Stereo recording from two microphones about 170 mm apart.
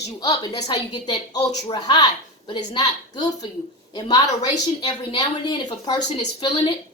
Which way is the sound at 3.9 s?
25° left (ahead or behind).